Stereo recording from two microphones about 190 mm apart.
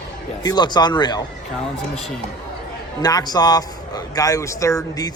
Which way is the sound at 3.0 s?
20° left (ahead or behind).